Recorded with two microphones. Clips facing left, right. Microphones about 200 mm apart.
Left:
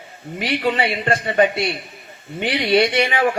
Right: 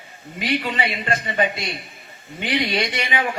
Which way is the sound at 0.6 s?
50° left (ahead or behind).